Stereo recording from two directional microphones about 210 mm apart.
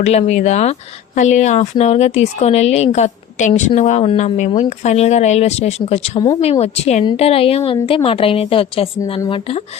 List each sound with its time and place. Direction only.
0.0 s a woman's voice: 30° left (ahead or behind)